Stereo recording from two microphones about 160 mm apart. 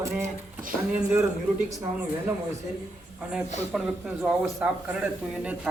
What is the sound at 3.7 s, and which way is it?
Speech, 5° right (ahead or behind).